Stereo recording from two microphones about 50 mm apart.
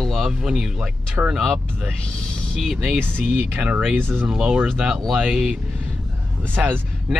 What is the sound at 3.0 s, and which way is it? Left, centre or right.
Speech, right.